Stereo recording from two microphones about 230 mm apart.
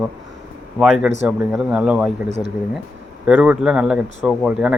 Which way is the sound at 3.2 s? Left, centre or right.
Centre.